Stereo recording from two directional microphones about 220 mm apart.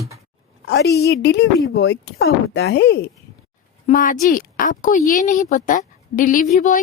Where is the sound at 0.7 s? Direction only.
50° left (ahead or behind).